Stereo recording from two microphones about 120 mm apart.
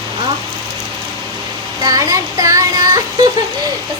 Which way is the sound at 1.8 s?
30° right (ahead or behind).